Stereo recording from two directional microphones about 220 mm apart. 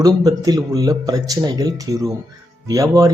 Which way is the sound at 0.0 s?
15° right (ahead or behind).